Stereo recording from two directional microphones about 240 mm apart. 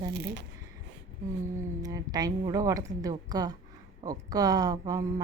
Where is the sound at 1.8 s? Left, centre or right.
Centre.